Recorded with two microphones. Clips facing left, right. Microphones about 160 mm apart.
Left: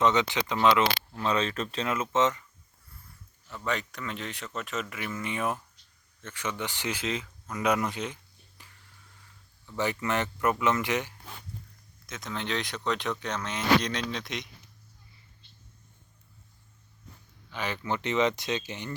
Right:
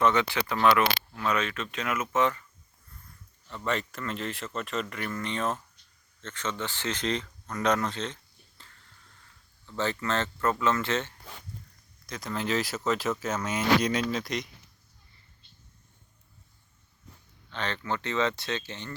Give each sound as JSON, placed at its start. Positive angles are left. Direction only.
{"t": 0.0, "sound": "speech", "side_deg": 20}
{"t": 1.1, "sound": "speech", "side_deg": 30}
{"t": 3.5, "sound": "speech", "side_deg": 0}
{"t": 12.0, "sound": "speech", "side_deg": 0}
{"t": 17.5, "sound": "speech", "side_deg": 10}